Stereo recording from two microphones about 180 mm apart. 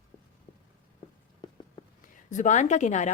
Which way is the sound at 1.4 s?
25° left (ahead or behind).